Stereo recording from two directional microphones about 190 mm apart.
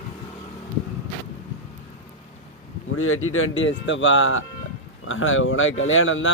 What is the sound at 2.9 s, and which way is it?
Speech, 90° left.